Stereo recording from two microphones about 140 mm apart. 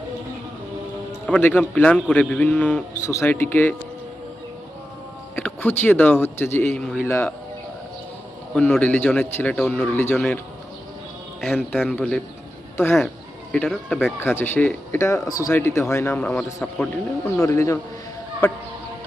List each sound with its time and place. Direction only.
1.3 s speech: 10° left (ahead or behind)
5.4 s speech: 10° left (ahead or behind)
7.1 s speech: 20° left (ahead or behind)
8.5 s speech: 10° left (ahead or behind)
11.9 s speech: 5° left (ahead or behind)
12.7 s speech: 15° left (ahead or behind)
17.2 s speech: 20° left (ahead or behind)